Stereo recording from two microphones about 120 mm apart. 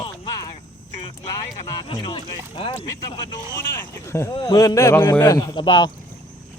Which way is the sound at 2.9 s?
35° left (ahead or behind).